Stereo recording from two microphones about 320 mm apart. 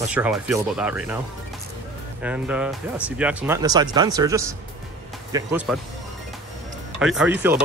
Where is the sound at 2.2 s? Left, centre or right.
Centre.